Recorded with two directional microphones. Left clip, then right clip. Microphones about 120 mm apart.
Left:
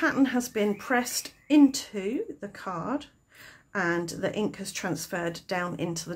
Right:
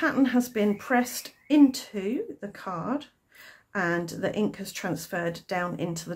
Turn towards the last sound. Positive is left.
turn(degrees=20)  # may be behind; listen again after turning